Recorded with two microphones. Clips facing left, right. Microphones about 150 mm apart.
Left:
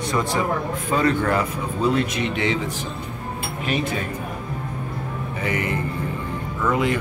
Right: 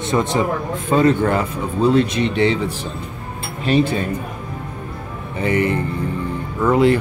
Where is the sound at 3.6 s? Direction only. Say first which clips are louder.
Right 8 dB; 30° right (ahead or behind).